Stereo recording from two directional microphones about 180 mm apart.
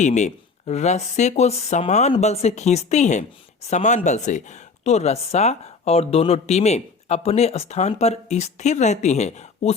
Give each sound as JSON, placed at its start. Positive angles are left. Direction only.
{"t": 0.0, "sound": "speech", "side_deg": 40}